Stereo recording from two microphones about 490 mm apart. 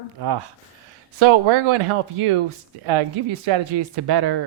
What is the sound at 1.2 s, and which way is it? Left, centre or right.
Speech, right.